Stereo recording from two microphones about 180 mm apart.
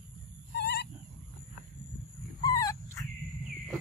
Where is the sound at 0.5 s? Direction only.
70° left (ahead or behind).